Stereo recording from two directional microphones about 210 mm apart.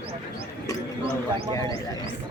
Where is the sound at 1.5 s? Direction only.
15° left (ahead or behind).